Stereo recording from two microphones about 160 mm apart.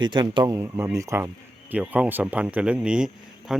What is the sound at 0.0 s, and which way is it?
Speech, 30° right (ahead or behind).